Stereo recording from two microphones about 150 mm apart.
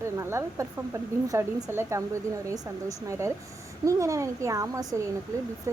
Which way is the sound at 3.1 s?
20° right (ahead or behind).